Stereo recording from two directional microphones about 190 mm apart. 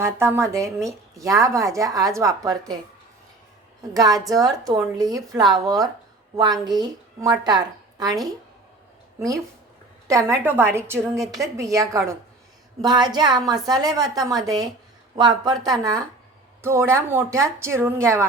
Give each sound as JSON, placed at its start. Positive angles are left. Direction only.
{"t": 0.0, "sound": "a woman's voice", "side_deg": -15}
{"t": 3.9, "sound": "a woman's voice", "side_deg": -20}
{"t": 10.1, "sound": "a woman's voice", "side_deg": -15}